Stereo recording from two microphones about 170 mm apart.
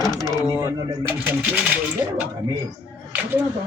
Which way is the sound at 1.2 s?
10° right (ahead or behind).